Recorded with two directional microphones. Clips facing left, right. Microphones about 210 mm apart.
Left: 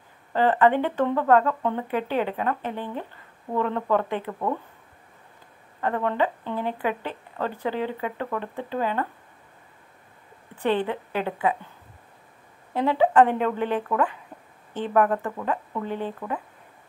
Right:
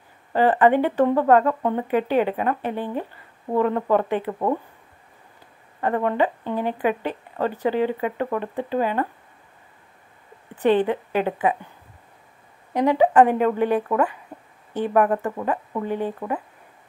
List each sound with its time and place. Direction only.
0.3 s speech: 15° right (ahead or behind)
4.3 s speech: 25° right (ahead or behind)
5.8 s speech: 15° right (ahead or behind)
10.6 s speech: 15° right (ahead or behind)
12.7 s speech: 15° right (ahead or behind)